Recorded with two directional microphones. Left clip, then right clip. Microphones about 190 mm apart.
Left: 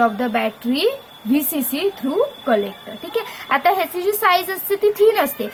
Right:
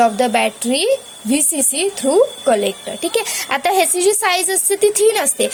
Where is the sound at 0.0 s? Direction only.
20° right (ahead or behind).